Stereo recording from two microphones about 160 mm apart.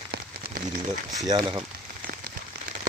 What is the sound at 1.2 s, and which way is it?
Speech, 25° right (ahead or behind).